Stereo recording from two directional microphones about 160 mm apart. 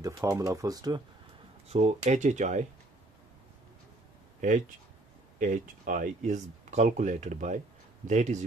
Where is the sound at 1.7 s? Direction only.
40° right (ahead or behind).